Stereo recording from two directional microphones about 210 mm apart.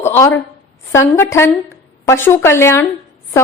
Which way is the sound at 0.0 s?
10° left (ahead or behind).